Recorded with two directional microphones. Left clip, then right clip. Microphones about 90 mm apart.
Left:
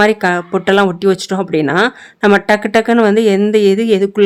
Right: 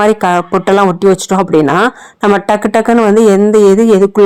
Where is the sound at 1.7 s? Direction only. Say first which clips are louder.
Right 2 dB; 20° right (ahead or behind).